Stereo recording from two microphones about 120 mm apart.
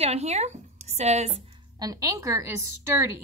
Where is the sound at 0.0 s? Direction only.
60° right (ahead or behind).